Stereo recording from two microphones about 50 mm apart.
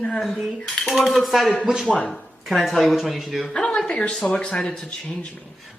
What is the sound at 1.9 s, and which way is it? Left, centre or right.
Speech, left.